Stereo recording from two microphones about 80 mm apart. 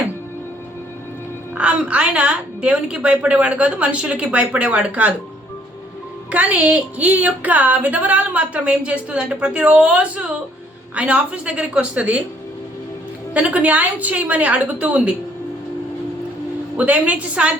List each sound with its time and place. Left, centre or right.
1.5 s speech: centre
6.3 s speech: centre
13.3 s speech: centre
16.7 s a woman's voice: centre